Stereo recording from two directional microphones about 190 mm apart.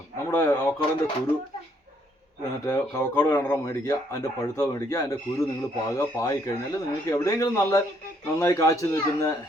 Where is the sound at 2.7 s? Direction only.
15° left (ahead or behind).